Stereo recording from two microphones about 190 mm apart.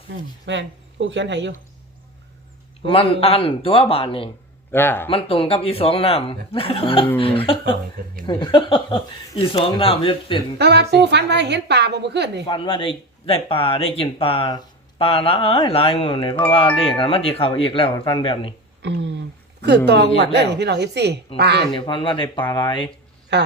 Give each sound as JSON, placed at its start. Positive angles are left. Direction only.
{"t": 0.4, "sound": "speech", "side_deg": -75}
{"t": 2.9, "sound": "speech", "side_deg": 30}
{"t": 4.7, "sound": "speech", "side_deg": 10}
{"t": 5.0, "sound": "speech", "side_deg": 30}
{"t": 10.6, "sound": "a woman's voice", "side_deg": -60}
{"t": 12.5, "sound": "speech", "side_deg": 25}
{"t": 18.8, "sound": "a sound", "side_deg": -65}
{"t": 19.6, "sound": "a woman's voice", "side_deg": -60}
{"t": 21.7, "sound": "speech", "side_deg": 25}
{"t": 23.3, "sound": "a man's voice", "side_deg": -65}